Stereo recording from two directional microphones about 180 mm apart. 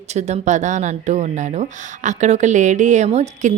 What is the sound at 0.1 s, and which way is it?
A woman's voice, 40° right (ahead or behind).